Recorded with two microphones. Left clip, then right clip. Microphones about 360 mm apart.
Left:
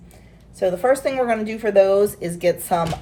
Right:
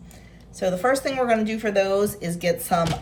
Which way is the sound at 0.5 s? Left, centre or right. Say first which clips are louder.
Left 3 dB; centre.